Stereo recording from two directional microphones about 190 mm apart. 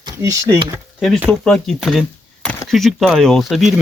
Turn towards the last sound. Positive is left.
turn(degrees=0)  # may be behind; listen again after turning